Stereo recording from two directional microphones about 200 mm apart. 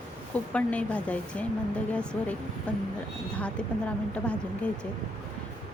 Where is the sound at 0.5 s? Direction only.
5° left (ahead or behind).